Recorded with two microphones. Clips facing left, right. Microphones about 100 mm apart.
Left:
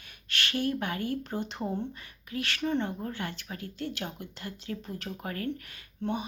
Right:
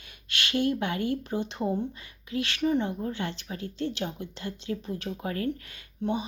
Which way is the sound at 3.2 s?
25° right (ahead or behind).